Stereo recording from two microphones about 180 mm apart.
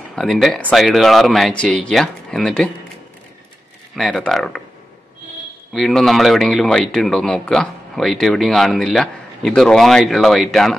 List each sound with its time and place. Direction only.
0.1 s speech: centre (ahead or behind)
3.9 s speech: centre (ahead or behind)
5.7 s speech: centre (ahead or behind)